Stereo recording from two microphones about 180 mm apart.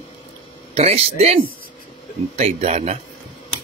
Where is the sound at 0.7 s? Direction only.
35° right (ahead or behind).